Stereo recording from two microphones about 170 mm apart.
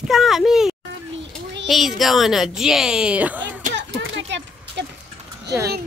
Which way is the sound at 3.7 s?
90° right.